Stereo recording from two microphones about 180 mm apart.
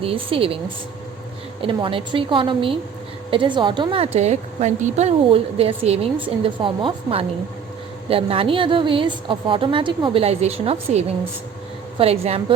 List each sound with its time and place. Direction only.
0.0 s a woman's voice: 30° right (ahead or behind)
1.6 s a woman's voice: 30° right (ahead or behind)